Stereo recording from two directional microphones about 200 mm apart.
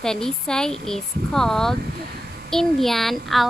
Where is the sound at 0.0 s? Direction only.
5° left (ahead or behind).